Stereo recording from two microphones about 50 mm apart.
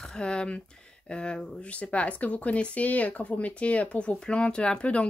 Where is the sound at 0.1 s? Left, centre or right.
Centre.